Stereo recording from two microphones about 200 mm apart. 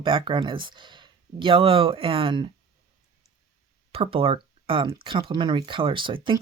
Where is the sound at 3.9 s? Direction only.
30° right (ahead or behind).